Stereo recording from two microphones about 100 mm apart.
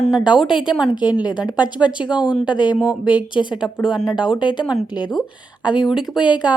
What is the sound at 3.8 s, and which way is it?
Speech, 5° right (ahead or behind).